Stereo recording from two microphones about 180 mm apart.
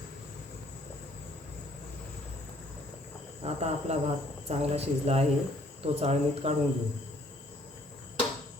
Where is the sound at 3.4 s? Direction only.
35° right (ahead or behind).